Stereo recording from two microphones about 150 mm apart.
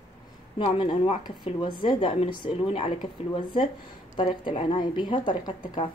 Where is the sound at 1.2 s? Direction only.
35° left (ahead or behind).